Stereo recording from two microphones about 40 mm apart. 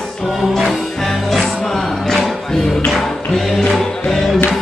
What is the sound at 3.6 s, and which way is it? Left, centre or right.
Music, centre.